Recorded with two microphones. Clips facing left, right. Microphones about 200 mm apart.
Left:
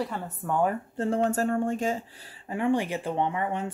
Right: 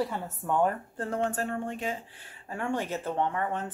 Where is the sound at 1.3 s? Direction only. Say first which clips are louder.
Left 6 dB; 45° left (ahead or behind).